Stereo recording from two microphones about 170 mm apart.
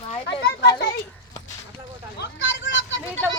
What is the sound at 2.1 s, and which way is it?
Vehicle, 90° left.